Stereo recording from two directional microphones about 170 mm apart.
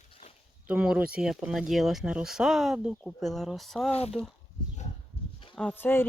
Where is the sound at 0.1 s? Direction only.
35° left (ahead or behind).